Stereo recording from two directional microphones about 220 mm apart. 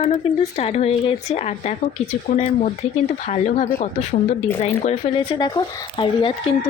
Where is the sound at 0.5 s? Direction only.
30° left (ahead or behind).